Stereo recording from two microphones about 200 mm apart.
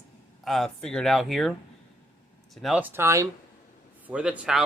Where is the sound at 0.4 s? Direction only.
Centre (ahead or behind).